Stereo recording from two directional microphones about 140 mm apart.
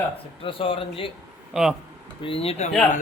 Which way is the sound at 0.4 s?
40° left (ahead or behind).